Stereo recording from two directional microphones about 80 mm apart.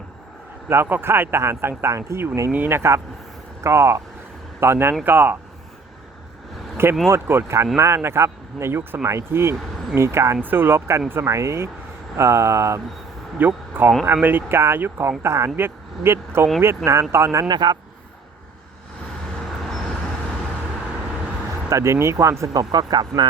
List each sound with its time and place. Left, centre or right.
0.7 s speech: right
7.1 s speech: right
13.4 s speech: right
17.5 s a man's voice: right
21.7 s speech: right